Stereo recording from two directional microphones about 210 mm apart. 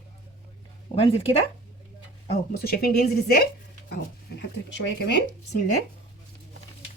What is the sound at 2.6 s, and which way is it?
Speech, 45° left (ahead or behind).